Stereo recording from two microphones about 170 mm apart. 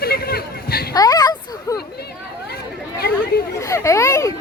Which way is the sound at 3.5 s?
15° left (ahead or behind).